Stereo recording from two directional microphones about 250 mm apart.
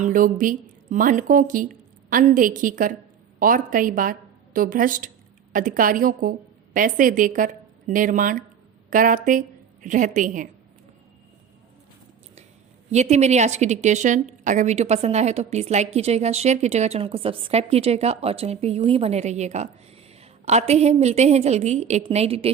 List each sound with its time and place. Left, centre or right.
0.0 s a woman's voice: right
12.9 s a woman's voice: right